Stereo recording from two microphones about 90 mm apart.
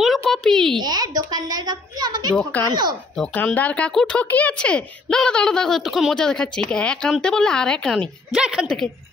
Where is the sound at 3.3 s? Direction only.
15° left (ahead or behind).